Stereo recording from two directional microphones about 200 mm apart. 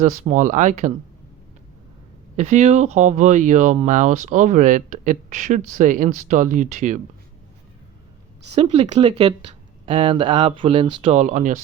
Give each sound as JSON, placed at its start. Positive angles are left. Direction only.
{"t": 0.0, "sound": "speech", "side_deg": -35}
{"t": 2.3, "sound": "speech", "side_deg": -35}
{"t": 8.5, "sound": "speech", "side_deg": -25}